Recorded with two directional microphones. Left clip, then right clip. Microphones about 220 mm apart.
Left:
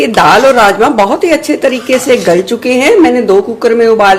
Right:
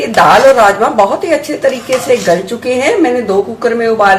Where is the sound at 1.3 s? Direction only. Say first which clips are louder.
Left 2 dB; 40° left (ahead or behind).